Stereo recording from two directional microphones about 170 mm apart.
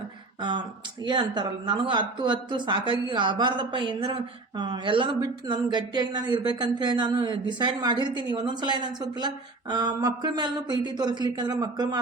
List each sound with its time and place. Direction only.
1.0 s speech: 25° right (ahead or behind)